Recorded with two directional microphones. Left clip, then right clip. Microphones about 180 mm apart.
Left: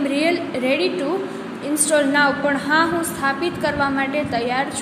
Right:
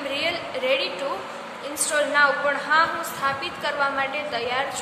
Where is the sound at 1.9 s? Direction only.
20° left (ahead or behind).